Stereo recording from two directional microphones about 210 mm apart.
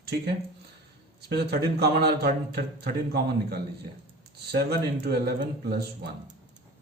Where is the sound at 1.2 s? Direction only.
50° right (ahead or behind).